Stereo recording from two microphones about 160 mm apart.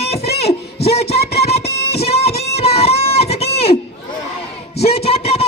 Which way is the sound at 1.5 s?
40° left (ahead or behind).